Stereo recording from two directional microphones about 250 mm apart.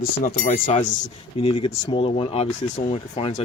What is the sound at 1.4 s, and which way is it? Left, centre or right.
Speech, left.